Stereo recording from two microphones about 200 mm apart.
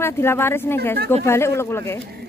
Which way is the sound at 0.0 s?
10° left (ahead or behind).